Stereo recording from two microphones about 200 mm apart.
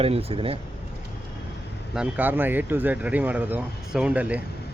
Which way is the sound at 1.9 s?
5° right (ahead or behind).